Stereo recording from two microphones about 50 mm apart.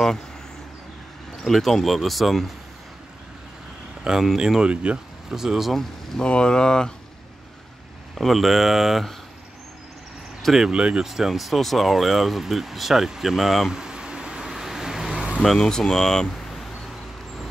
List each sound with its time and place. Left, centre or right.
1.5 s speech: centre
4.0 s speech: centre
5.3 s speech: centre
5.7 s speech: centre
6.2 s speech: centre
8.1 s speech: centre
10.6 s speech: right
11.1 s speech: centre
15.4 s speech: centre